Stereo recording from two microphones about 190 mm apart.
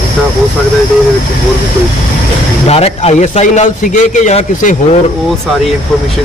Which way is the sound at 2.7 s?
30° left (ahead or behind).